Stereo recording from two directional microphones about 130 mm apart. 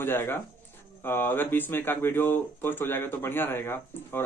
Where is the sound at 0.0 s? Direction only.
15° left (ahead or behind).